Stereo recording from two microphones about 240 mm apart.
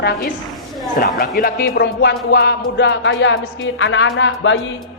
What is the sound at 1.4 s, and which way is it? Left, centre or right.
Music, left.